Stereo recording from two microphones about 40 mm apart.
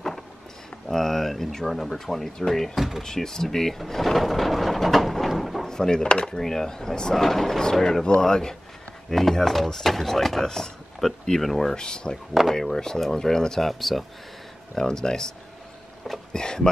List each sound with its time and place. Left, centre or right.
0.8 s speech: centre
5.7 s speech: centre
11.7 s speech: centre
13.7 s speech: centre
14.8 s speech: centre
16.0 s speech: centre
16.3 s speech: centre